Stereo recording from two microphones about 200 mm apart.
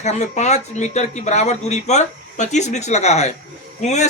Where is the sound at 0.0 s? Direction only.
35° left (ahead or behind).